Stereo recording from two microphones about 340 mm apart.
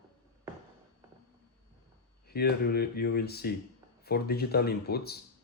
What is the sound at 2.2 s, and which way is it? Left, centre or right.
Speech, left.